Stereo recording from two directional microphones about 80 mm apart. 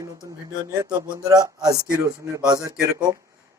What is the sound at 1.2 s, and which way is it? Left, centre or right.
Speech, right.